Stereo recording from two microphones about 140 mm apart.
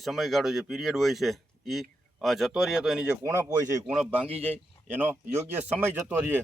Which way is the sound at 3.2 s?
20° right (ahead or behind).